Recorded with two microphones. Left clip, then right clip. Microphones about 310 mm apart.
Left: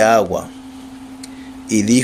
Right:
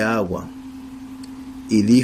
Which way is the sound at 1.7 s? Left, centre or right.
Centre.